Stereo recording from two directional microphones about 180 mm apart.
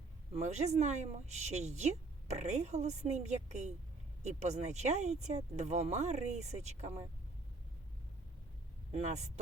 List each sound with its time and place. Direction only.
0.3 s a woman's voice: 40° right (ahead or behind)
8.9 s a woman's voice: 40° right (ahead or behind)